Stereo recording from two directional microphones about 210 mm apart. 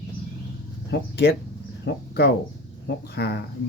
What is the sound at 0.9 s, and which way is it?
A man's voice, 50° left (ahead or behind).